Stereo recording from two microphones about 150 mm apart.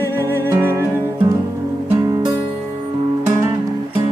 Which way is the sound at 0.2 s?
20° right (ahead or behind).